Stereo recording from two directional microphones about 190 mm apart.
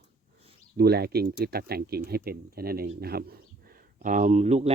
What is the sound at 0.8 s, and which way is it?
Speech, 55° right (ahead or behind).